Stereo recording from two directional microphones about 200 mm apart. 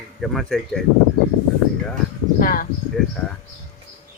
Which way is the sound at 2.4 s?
45° left (ahead or behind).